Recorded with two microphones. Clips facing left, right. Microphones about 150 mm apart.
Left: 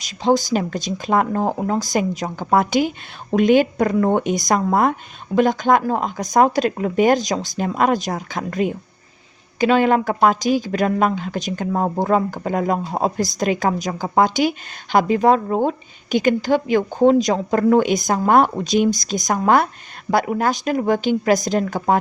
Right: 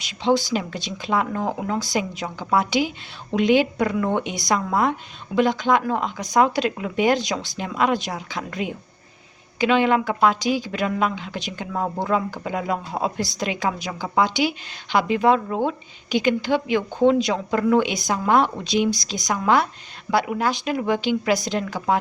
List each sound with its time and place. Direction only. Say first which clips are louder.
0.0 s speech: left 3 dB; 45° left (ahead or behind)